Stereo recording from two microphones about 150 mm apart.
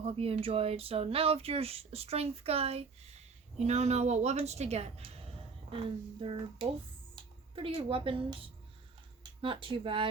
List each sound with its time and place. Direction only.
0.0 s a woman's voice: 40° right (ahead or behind)
9.4 s speech: 35° right (ahead or behind)